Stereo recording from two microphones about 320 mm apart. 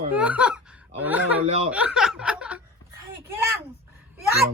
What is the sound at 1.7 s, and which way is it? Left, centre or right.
Snicker, centre.